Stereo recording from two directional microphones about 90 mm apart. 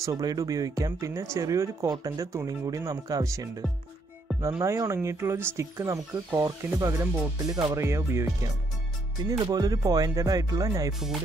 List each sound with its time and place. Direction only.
0.0 s speech: 45° right (ahead or behind)
4.5 s speech: 30° right (ahead or behind)
9.2 s speech: 50° right (ahead or behind)